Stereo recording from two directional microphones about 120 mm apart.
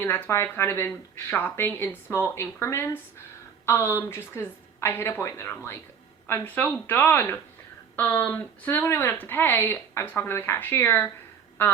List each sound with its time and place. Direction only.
0.0 s a woman's voice: 20° left (ahead or behind)